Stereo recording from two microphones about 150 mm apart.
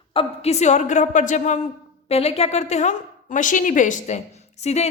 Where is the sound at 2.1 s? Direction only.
45° left (ahead or behind).